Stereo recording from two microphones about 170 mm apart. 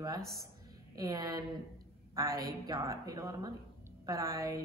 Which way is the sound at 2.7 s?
20° right (ahead or behind).